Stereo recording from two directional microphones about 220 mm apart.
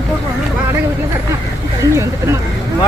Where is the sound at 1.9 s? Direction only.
15° right (ahead or behind).